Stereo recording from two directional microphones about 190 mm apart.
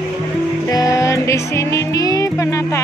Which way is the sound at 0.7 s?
20° left (ahead or behind).